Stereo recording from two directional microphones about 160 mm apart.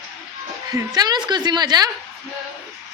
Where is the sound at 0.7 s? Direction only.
25° right (ahead or behind).